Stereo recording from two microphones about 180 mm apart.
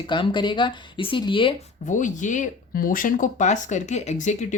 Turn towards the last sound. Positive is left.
turn(degrees=40)  # may be behind; listen again after turning